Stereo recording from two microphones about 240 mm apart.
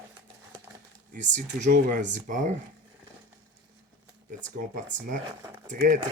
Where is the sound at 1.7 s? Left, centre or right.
Right.